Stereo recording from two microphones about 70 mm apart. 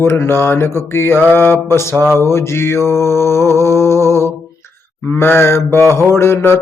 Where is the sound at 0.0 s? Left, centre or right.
Left.